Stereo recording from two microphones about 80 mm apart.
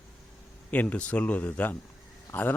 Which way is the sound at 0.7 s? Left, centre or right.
Centre.